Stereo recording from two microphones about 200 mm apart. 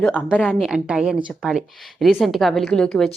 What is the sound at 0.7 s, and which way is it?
A woman's voice, 5° right (ahead or behind).